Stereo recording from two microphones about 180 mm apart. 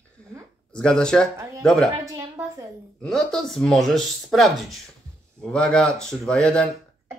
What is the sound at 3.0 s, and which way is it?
Speech, centre (ahead or behind).